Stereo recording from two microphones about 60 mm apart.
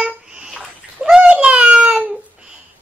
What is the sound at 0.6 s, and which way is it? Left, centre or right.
Bathtub, centre.